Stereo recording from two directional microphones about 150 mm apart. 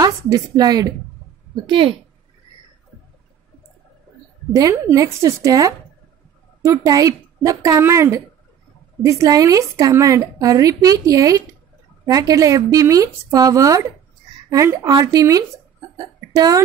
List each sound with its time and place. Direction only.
0.0 s a woman's voice: 25° right (ahead or behind)
4.6 s a woman's voice: 25° right (ahead or behind)